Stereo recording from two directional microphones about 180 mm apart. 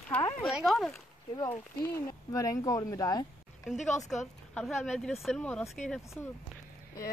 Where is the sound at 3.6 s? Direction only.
Centre (ahead or behind).